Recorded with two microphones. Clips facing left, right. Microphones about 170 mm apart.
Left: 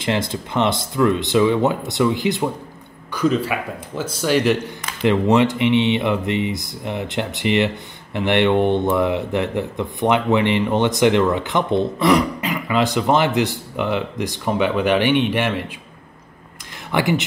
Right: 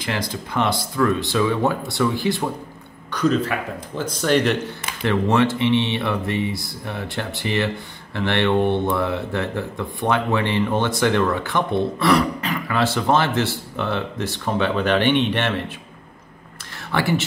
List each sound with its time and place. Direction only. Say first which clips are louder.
0.0 s speech: left 4 dB; 25° left (ahead or behind)
3.1 s a man's voice: left 1 dB; 10° left (ahead or behind)
16.9 s a man's voice: left 2 dB; 15° left (ahead or behind)